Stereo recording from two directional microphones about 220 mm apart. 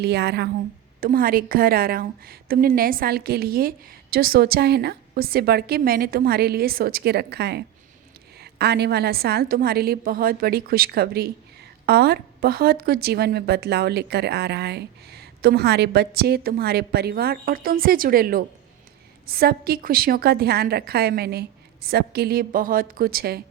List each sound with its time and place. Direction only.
0.0 s a woman's voice: 50° right (ahead or behind)